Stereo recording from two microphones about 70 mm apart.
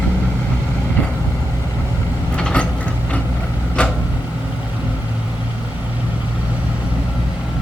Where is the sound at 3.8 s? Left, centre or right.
Centre.